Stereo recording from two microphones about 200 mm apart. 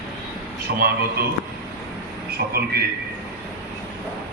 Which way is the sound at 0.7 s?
55° right (ahead or behind).